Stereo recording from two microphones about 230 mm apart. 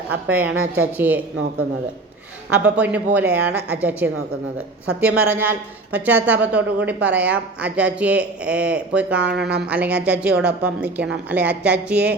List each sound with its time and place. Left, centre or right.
0.3 s a woman's voice: centre
0.5 s a woman's voice: right
0.9 s a woman's voice: centre
2.5 s a woman's voice: centre
9.2 s speech: right
9.6 s a woman's voice: centre